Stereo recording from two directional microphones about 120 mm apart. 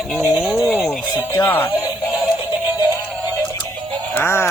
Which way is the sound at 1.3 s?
20° left (ahead or behind).